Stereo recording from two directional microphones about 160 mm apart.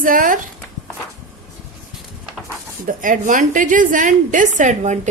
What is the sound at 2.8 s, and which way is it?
A woman's voice, 55° right (ahead or behind).